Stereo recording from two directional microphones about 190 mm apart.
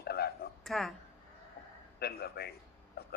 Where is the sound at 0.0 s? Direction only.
55° left (ahead or behind).